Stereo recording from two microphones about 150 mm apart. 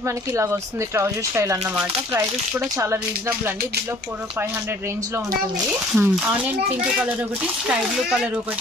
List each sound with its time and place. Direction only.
0.0 s speech: 20° right (ahead or behind)
5.9 s speech: 10° right (ahead or behind)
7.6 s speech: 5° right (ahead or behind)